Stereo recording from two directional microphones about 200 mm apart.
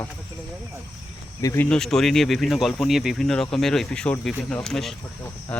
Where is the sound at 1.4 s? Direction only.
15° left (ahead or behind).